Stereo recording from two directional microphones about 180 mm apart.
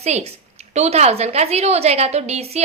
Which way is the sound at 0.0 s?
35° right (ahead or behind).